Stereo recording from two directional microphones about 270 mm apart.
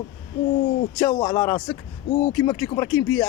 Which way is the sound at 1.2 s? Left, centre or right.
Centre.